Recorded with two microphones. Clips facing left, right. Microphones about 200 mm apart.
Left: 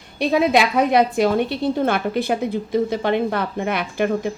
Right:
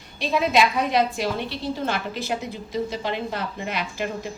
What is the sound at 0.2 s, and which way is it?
A woman's voice, 60° left (ahead or behind).